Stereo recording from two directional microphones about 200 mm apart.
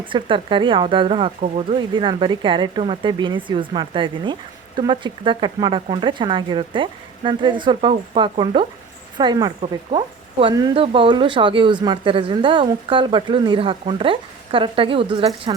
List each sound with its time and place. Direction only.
0.0 s speech: 25° right (ahead or behind)